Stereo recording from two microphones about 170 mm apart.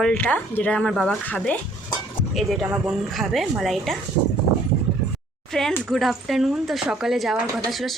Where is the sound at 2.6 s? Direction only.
10° right (ahead or behind).